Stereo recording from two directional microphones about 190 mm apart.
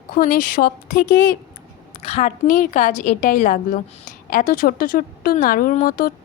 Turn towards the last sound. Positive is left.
turn(degrees=45)  # may be behind; listen again after turning